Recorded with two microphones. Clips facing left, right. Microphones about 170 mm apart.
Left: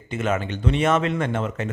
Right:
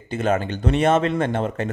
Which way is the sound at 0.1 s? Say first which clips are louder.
Right 3 dB; 35° right (ahead or behind).